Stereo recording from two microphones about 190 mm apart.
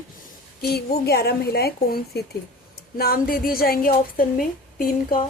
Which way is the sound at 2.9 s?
50° left (ahead or behind).